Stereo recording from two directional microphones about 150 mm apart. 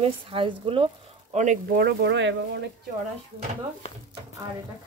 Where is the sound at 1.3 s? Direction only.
55° right (ahead or behind).